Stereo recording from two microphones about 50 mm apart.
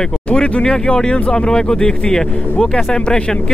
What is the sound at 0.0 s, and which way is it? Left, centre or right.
Speech, centre.